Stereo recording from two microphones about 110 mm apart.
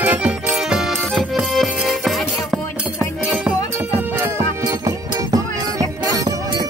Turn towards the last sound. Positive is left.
turn(degrees=-35)  # may be behind; listen again after turning